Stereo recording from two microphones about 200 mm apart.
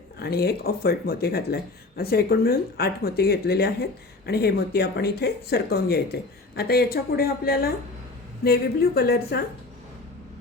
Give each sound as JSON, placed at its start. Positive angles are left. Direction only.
{"t": 0.2, "sound": "speech", "side_deg": 50}